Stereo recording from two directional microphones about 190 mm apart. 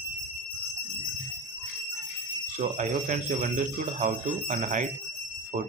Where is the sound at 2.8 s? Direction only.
40° right (ahead or behind).